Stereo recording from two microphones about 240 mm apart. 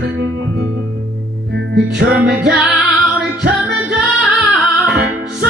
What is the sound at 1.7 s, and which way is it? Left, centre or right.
Music, right.